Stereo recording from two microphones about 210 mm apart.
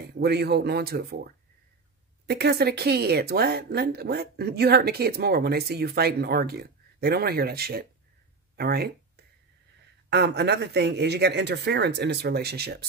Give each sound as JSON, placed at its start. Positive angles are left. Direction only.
{"t": 0.2, "sound": "speech", "side_deg": -50}